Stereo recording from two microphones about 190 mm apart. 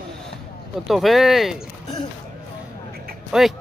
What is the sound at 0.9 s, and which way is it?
Speech, centre (ahead or behind).